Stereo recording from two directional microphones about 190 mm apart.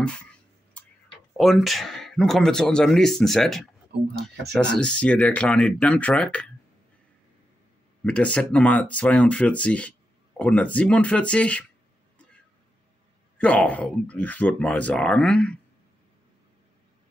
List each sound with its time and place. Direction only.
0.0 s a sound: 5° left (ahead or behind)
1.3 s speech: centre (ahead or behind)
8.0 s speech: 5° left (ahead or behind)
13.4 s speech: 5° left (ahead or behind)